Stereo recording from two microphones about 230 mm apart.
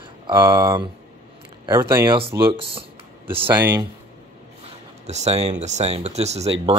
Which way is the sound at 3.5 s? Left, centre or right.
Centre.